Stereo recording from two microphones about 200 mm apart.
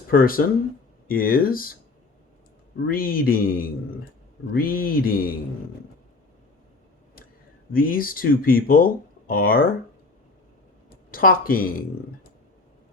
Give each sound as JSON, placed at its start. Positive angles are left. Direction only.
{"t": 0.1, "sound": "speech", "side_deg": 45}
{"t": 2.8, "sound": "speech", "side_deg": 45}
{"t": 7.7, "sound": "speech", "side_deg": 45}
{"t": 11.1, "sound": "speech", "side_deg": 45}